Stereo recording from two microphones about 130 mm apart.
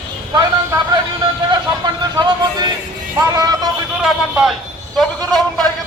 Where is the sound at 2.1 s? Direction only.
35° right (ahead or behind).